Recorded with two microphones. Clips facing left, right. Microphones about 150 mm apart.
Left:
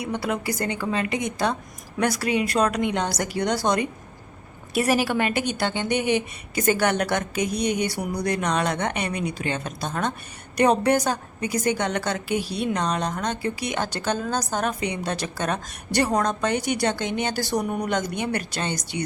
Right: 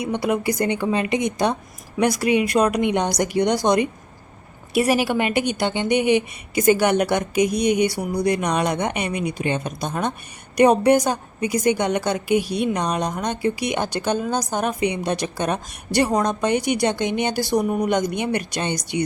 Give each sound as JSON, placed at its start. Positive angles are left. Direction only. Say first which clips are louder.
{"t": 0.0, "sound": "a woman's voice", "louder": "right 5 dB", "side_deg": -20}